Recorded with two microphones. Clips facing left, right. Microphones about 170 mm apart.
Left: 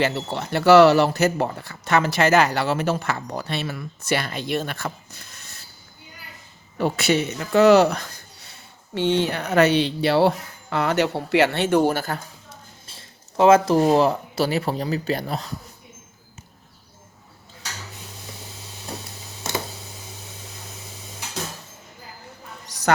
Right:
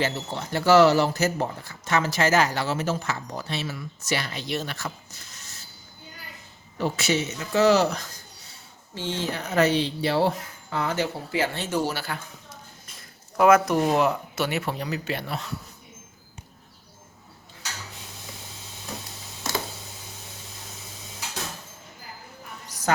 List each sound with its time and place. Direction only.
0.0 s speech: 70° left (ahead or behind)
6.7 s speech: 60° left (ahead or behind)
12.9 s speech: 25° left (ahead or behind)
22.7 s a sound: 70° left (ahead or behind)